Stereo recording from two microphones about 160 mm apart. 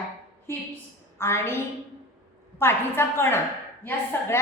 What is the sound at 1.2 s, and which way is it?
A woman's voice, 15° left (ahead or behind).